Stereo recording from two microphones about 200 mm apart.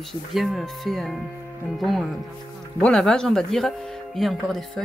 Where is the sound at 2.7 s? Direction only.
5° left (ahead or behind).